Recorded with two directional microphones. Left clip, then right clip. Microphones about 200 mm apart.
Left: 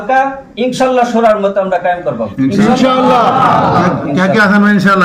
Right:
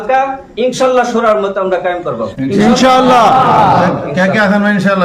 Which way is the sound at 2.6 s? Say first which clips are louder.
Right 3 dB; 45° right (ahead or behind).